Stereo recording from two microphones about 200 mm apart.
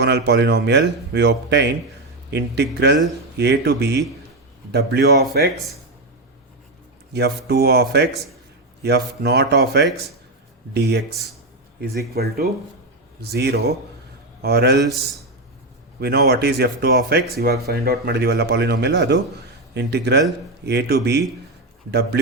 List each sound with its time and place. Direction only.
0.0 s speech: 55° right (ahead or behind)
7.1 s speech: 55° right (ahead or behind)
16.0 s speech: 55° right (ahead or behind)